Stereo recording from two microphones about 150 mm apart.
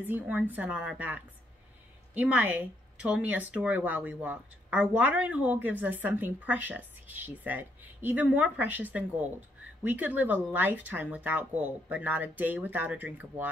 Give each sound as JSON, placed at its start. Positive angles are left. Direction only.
{"t": 0.0, "sound": "speech", "side_deg": -10}